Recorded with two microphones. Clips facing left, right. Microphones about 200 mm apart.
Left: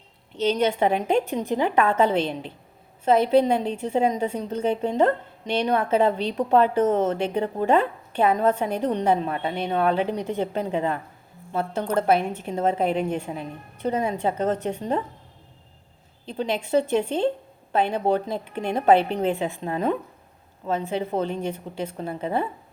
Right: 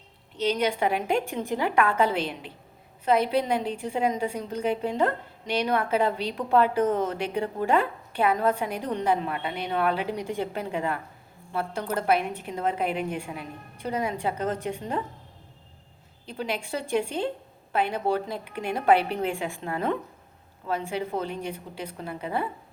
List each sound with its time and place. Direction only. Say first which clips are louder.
0.5 s a woman's voice: left 4 dB; 25° left (ahead or behind)
16.2 s a woman's voice: left 5 dB; 25° left (ahead or behind)